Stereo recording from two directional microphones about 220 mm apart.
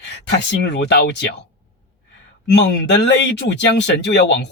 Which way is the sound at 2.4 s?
50° left (ahead or behind).